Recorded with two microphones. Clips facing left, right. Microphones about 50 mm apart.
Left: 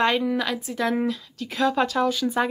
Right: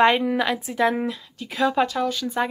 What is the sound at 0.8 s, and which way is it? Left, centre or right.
Speech, centre.